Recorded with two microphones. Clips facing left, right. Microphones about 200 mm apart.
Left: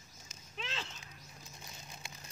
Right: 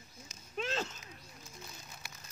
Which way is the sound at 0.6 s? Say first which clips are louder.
Right 8 dB; 45° right (ahead or behind).